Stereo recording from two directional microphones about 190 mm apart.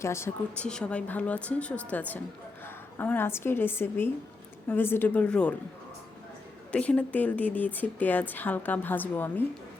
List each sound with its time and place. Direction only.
0.0 s a woman's voice: 15° left (ahead or behind)
6.7 s speech: 5° left (ahead or behind)